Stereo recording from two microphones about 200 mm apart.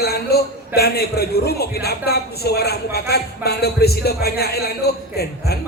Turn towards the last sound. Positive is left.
turn(degrees=50)  # may be behind; listen again after turning